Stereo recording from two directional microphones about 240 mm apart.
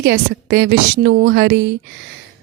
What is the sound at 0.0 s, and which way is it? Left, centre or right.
A woman's voice, right.